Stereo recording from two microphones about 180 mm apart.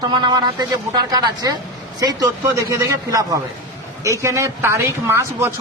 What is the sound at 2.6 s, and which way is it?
A man's voice, 15° right (ahead or behind).